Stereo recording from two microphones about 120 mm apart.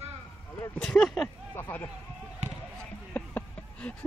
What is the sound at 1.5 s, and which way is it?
Speech, 15° left (ahead or behind).